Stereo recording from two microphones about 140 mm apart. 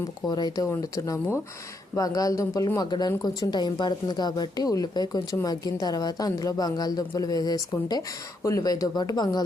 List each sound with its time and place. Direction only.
0.3 s speech: 30° left (ahead or behind)